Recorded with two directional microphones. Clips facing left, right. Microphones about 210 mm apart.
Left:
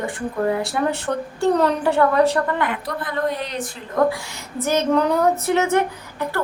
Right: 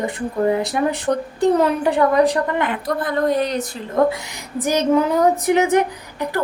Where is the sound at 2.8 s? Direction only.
45° right (ahead or behind).